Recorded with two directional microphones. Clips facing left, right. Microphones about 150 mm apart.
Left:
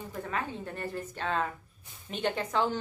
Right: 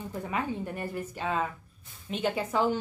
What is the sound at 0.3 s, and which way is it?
A woman's voice, 15° right (ahead or behind).